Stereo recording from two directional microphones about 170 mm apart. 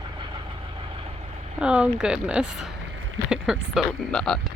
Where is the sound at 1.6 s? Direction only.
5° right (ahead or behind).